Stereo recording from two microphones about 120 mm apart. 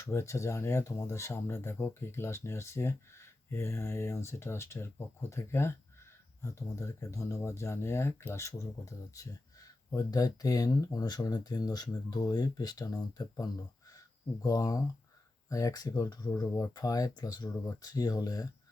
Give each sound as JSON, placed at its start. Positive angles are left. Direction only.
{"t": 0.0, "sound": "speech", "side_deg": 25}